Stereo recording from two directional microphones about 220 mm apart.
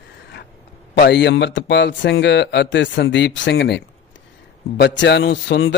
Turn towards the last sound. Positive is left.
turn(degrees=55)  # may be behind; listen again after turning